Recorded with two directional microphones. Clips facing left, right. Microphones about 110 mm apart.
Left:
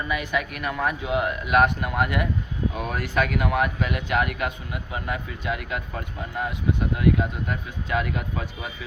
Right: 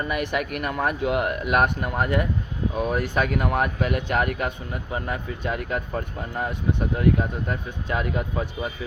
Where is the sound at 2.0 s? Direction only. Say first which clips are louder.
Right 2 dB; 35° right (ahead or behind).